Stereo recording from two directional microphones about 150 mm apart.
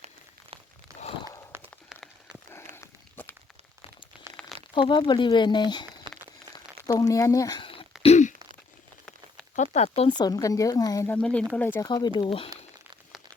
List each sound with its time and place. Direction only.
1.5 s run: 15° right (ahead or behind)
2.5 s walk: 15° left (ahead or behind)
4.7 s speech: 30° left (ahead or behind)
8.0 s a sound: 50° left (ahead or behind)
9.7 s speech: 45° left (ahead or behind)
10.1 s speech: 25° left (ahead or behind)
11.1 s speech: 10° left (ahead or behind)
11.8 s speech: 25° left (ahead or behind)